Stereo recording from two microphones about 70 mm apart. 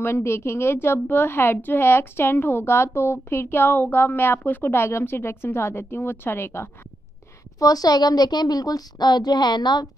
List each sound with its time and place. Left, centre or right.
0.0 s a woman's voice: left
7.5 s a woman's voice: left